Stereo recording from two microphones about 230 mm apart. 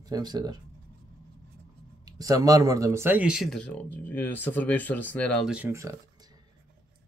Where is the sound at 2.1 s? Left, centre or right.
Centre.